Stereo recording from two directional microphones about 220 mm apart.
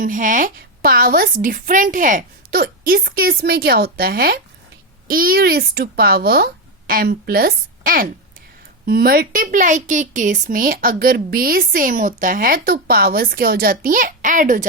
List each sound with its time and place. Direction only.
0.0 s a woman's voice: 35° right (ahead or behind)